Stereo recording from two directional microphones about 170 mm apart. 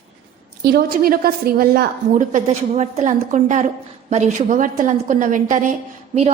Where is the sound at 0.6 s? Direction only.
65° right (ahead or behind).